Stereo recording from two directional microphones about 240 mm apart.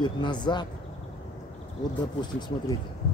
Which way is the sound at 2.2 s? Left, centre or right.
Centre.